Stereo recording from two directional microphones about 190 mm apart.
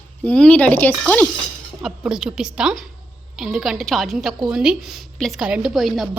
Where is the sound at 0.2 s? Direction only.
5° left (ahead or behind).